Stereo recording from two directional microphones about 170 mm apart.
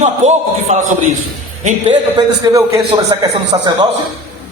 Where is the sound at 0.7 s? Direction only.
45° right (ahead or behind).